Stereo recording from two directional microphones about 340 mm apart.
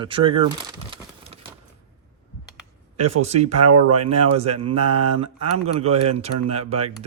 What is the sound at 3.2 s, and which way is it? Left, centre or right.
Speech, centre.